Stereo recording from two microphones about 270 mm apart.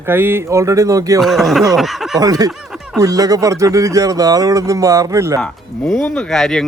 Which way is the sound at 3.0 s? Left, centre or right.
Centre.